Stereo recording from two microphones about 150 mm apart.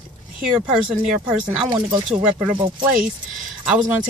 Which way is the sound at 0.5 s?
5° right (ahead or behind).